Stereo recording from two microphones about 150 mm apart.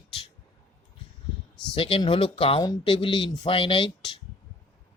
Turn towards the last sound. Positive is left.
turn(degrees=35)  # may be behind; listen again after turning